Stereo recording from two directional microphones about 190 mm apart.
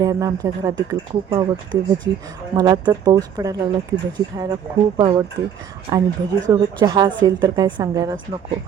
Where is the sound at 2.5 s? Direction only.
20° right (ahead or behind).